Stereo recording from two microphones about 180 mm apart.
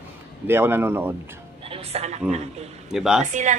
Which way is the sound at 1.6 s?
35° right (ahead or behind).